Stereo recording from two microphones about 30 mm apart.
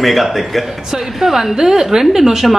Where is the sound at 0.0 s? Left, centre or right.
Centre.